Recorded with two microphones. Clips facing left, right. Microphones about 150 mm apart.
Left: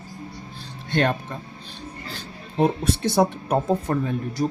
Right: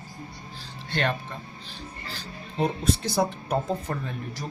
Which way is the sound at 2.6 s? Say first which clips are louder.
Left 4 dB; 55° left (ahead or behind).